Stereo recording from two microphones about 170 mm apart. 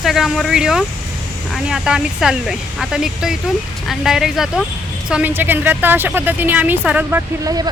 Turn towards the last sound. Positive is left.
turn(degrees=-20)  # may be behind; listen again after turning